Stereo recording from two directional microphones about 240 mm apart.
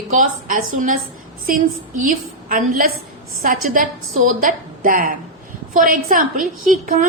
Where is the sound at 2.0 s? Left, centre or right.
Right.